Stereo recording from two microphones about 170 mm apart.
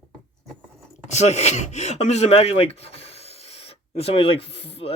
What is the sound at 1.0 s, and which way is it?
Speech, 40° left (ahead or behind).